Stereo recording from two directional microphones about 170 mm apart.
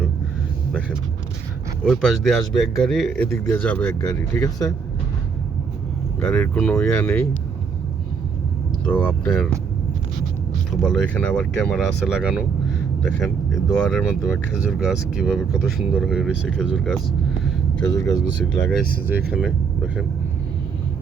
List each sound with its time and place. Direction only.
0.7 s speech: 10° right (ahead or behind); by 4.1 s 10° left (ahead or behind)
4.1 s speech: 20° left (ahead or behind)
6.1 s speech: 5° left (ahead or behind)
8.8 s speech: 5° left (ahead or behind)
10.7 s speech: 5° left (ahead or behind)
17.4 s a sound: 10° left (ahead or behind)
19.0 s speech: 10° right (ahead or behind)